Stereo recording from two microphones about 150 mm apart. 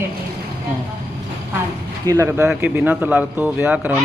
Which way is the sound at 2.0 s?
20° right (ahead or behind).